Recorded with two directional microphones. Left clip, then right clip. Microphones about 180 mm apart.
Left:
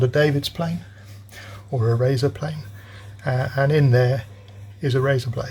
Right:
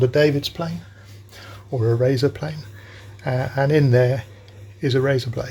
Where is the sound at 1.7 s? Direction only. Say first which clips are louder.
Right 2 dB; 5° right (ahead or behind).